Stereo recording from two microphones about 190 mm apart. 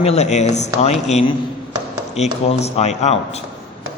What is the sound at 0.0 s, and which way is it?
A man's voice, 35° left (ahead or behind).